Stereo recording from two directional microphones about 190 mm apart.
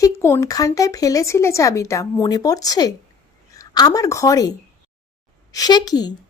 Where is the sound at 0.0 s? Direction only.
15° left (ahead or behind).